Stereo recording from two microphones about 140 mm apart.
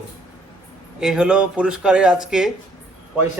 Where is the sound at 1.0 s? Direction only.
5° right (ahead or behind).